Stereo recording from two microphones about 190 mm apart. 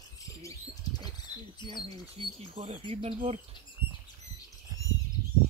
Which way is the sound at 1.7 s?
25° right (ahead or behind).